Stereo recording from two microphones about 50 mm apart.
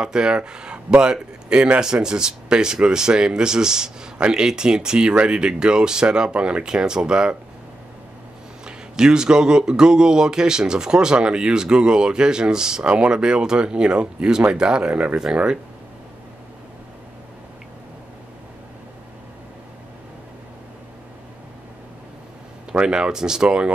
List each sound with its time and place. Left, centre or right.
0.0 s speech: centre
8.6 s speech: centre
22.7 s speech: centre